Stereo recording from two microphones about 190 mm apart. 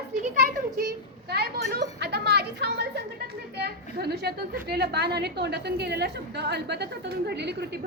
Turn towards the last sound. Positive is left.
turn(degrees=-60)  # may be behind; listen again after turning